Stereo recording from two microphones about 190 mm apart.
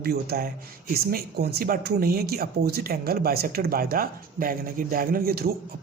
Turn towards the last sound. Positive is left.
turn(degrees=-55)  # may be behind; listen again after turning